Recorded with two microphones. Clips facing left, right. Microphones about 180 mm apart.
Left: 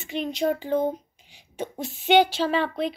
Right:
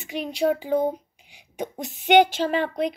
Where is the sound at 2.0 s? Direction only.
15° right (ahead or behind).